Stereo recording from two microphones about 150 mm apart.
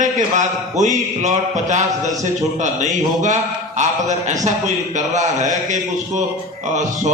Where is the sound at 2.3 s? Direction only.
55° right (ahead or behind).